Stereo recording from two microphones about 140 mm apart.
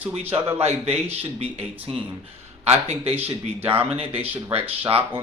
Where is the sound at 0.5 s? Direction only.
45° right (ahead or behind).